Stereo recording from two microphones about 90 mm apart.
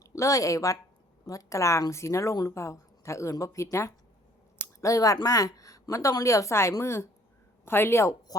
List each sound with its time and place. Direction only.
0.0 s a woman's voice: 35° left (ahead or behind)